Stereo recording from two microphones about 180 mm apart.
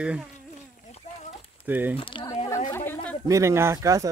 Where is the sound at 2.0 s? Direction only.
25° left (ahead or behind).